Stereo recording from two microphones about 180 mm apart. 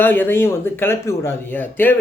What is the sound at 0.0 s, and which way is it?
Speech, 10° left (ahead or behind).